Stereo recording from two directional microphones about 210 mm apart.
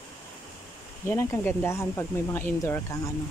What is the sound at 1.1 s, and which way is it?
Speech, 10° left (ahead or behind).